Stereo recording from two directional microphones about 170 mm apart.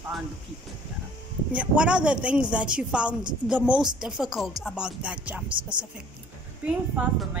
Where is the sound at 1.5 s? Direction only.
5° right (ahead or behind).